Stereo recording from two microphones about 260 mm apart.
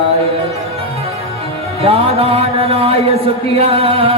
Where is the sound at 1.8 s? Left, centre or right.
Right.